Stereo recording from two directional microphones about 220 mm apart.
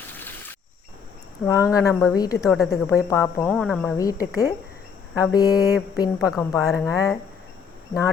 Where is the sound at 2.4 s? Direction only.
Centre (ahead or behind).